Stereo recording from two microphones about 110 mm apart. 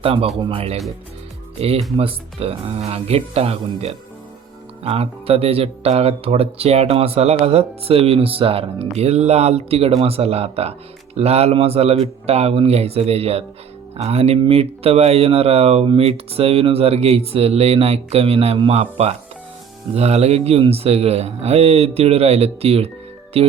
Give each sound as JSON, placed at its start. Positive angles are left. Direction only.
{"t": 0.0, "sound": "speech", "side_deg": -60}